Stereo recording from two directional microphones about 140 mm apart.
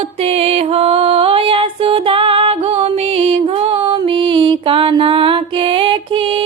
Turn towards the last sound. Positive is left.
turn(degrees=-40)  # may be behind; listen again after turning